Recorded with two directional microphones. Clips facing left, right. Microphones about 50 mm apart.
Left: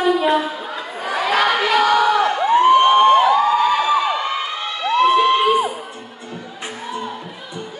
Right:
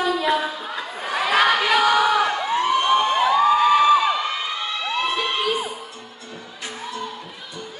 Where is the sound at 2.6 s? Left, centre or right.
Left.